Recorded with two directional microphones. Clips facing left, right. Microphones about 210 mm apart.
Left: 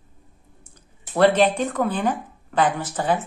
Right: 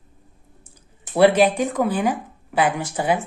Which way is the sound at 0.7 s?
10° right (ahead or behind).